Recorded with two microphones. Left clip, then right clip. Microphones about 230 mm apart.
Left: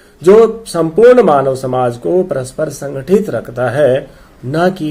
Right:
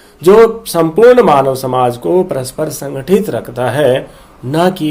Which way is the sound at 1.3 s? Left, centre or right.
Right.